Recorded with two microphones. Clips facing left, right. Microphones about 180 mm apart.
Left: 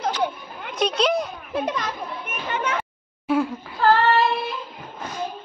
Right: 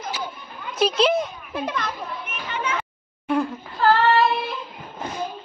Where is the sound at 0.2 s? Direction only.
60° left (ahead or behind).